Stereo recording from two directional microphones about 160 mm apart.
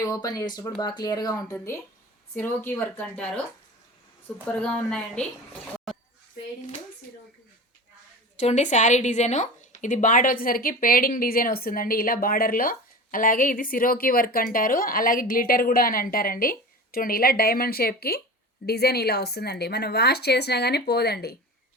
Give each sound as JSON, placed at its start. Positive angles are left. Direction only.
{"t": 0.0, "sound": "a woman's voice", "side_deg": 20}
{"t": 8.4, "sound": "a woman's voice", "side_deg": 45}
{"t": 18.6, "sound": "speech", "side_deg": 85}